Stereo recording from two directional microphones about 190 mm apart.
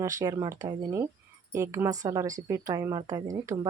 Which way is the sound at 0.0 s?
15° right (ahead or behind).